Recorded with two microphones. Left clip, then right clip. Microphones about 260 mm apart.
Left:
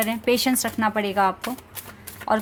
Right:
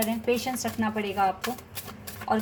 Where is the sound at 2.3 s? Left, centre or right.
Left.